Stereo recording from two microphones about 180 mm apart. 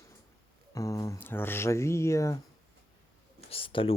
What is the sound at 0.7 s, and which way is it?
Speech, 20° left (ahead or behind).